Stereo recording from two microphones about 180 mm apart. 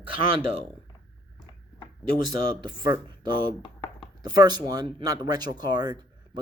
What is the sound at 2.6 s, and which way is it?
Speech, 25° right (ahead or behind).